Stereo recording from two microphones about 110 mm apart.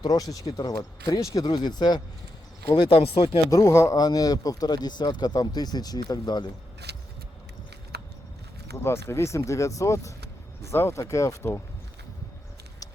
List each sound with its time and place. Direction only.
0.0 s speech: 35° left (ahead or behind)
2.9 s speech: 65° left (ahead or behind)
3.5 s speech: 30° left (ahead or behind)
8.7 s speech: 25° left (ahead or behind)